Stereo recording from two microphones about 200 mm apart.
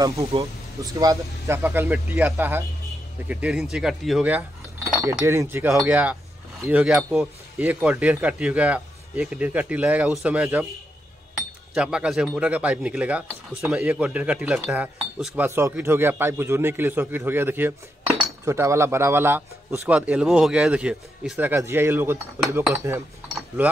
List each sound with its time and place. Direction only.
0.0 s a man's voice: 15° right (ahead or behind)
11.7 s a man's voice: 5° right (ahead or behind)